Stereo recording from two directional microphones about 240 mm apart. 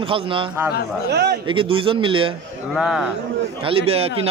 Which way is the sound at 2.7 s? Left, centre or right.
Centre.